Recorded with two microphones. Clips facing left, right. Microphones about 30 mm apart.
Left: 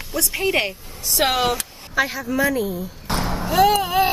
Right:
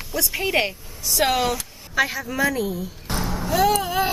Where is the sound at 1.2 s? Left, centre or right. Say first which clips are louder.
Left 2 dB; left.